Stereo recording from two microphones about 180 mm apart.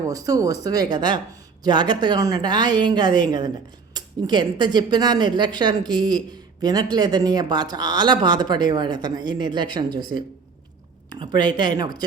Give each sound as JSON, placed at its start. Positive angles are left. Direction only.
{"t": 0.1, "sound": "speech", "side_deg": -20}
{"t": 11.1, "sound": "speech", "side_deg": -25}